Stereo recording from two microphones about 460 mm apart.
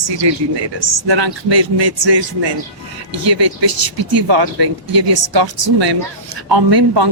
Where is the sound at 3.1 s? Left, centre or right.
Right.